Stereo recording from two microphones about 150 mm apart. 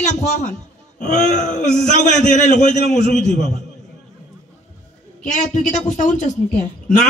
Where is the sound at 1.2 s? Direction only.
55° left (ahead or behind).